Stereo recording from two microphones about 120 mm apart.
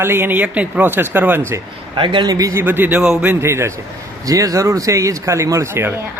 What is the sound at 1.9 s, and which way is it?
Speech, 45° right (ahead or behind).